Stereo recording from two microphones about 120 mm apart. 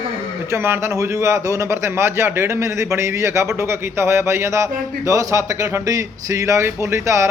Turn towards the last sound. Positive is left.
turn(degrees=-25)  # may be behind; listen again after turning